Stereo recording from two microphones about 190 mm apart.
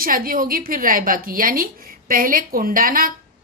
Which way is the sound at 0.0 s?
50° right (ahead or behind).